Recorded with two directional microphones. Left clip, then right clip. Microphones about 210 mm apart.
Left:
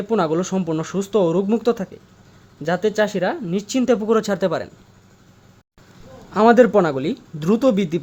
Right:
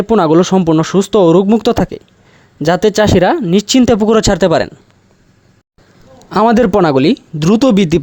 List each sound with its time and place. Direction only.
0.0 s speech: 45° right (ahead or behind)
6.3 s speech: 45° right (ahead or behind)